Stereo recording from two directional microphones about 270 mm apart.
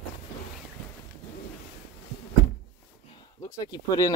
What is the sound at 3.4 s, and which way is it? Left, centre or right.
Speech, centre.